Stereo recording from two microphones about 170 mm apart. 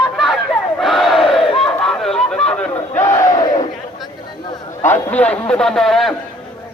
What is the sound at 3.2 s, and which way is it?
Battle cry, 20° left (ahead or behind).